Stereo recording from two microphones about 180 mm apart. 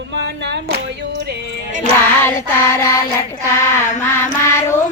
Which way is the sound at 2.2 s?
15° left (ahead or behind).